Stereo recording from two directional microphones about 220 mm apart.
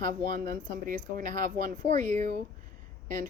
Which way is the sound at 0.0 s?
40° right (ahead or behind).